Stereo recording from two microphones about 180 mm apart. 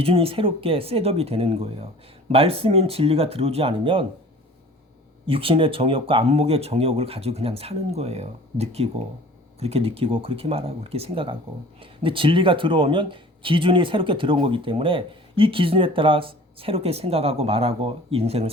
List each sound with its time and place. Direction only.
0.0 s speech: 30° right (ahead or behind)
5.2 s speech: 30° right (ahead or behind)